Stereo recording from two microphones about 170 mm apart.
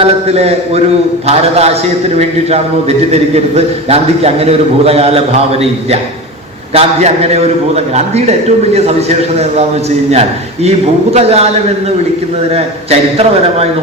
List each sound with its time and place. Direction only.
0.0 s a man's voice: 40° right (ahead or behind)
12.5 s a man's voice: 35° right (ahead or behind)